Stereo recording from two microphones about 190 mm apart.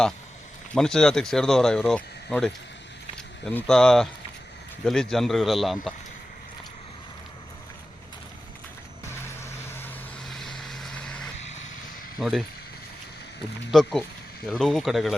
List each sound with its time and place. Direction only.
0.7 s speech: 5° left (ahead or behind)
9.0 s vehicle: 10° left (ahead or behind)
10.2 s vehicle: centre (ahead or behind)
12.2 s speech: centre (ahead or behind)
13.7 s speech: centre (ahead or behind)